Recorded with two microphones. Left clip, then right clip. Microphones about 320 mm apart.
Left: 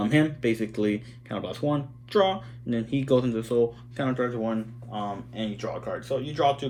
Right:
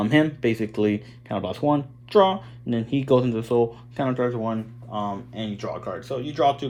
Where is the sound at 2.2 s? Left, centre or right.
Right.